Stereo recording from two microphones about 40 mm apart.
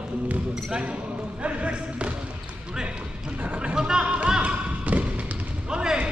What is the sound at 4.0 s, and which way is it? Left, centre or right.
Speech, right.